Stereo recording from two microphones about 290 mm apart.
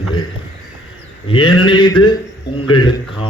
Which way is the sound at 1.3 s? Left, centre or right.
Centre.